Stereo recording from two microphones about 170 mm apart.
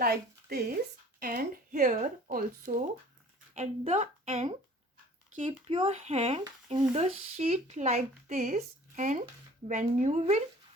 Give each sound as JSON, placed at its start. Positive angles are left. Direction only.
{"t": 0.0, "sound": "a woman's voice", "side_deg": -65}
{"t": 3.5, "sound": "a woman's voice", "side_deg": -40}